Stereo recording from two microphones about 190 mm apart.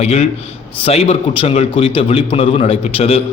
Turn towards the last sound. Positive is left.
turn(degrees=30)  # may be behind; listen again after turning